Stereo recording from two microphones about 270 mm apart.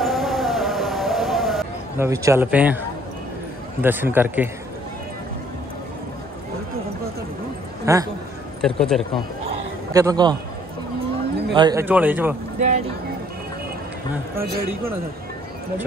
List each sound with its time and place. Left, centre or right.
0.0 s music: centre
2.0 s a man's voice: centre
3.8 s a man's voice: centre
7.8 s a man's voice: centre
8.5 s speech: centre
9.9 s a man's voice: centre
11.5 s a man's voice: centre
12.5 s a sound: right